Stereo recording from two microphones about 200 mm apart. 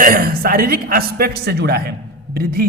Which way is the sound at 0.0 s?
45° right (ahead or behind).